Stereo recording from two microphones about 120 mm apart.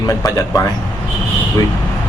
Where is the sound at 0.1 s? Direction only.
30° left (ahead or behind).